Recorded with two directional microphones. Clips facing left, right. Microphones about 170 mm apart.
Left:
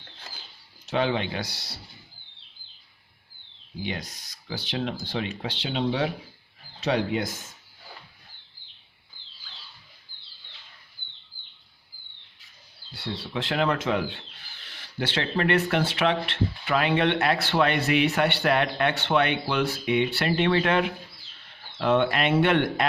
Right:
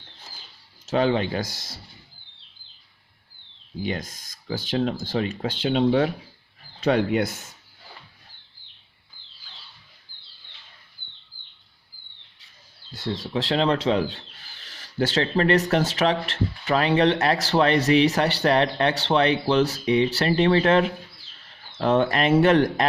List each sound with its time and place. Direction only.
0.9 s speech: 40° right (ahead or behind)
3.8 s speech: 45° right (ahead or behind)
12.9 s speech: 45° right (ahead or behind)